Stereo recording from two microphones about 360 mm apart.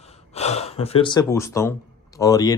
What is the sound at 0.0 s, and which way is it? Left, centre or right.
Speech, centre.